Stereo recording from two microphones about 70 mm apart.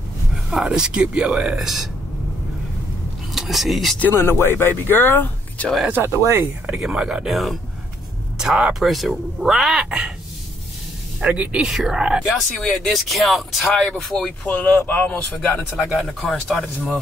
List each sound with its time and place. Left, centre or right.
0.3 s speech: centre
3.3 s speech: centre
4.1 s speech: left
5.9 s speech: right
6.1 s speech: right
6.8 s speech: centre
11.2 s speech: centre
11.6 s speech: centre
12.5 s speech: centre
14.4 s speech: left
15.7 s speech: centre
16.2 s speech: centre